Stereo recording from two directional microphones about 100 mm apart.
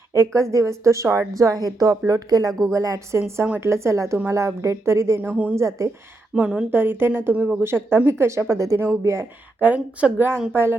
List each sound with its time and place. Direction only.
0.1 s a woman's voice: 30° right (ahead or behind)
6.3 s a woman's voice: 10° right (ahead or behind)
6.7 s speech: 20° right (ahead or behind)
9.6 s a woman's voice: 15° right (ahead or behind)